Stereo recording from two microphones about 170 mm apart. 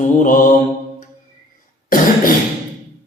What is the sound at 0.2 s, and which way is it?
Mantra, 50° left (ahead or behind).